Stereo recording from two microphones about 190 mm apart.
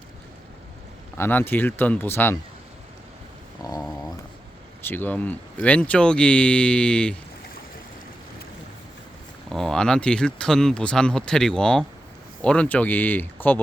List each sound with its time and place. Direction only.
1.2 s speech: 10° left (ahead or behind)
3.6 s a sound: 20° left (ahead or behind)
4.9 s speech: 10° left (ahead or behind)
9.5 s speech: centre (ahead or behind)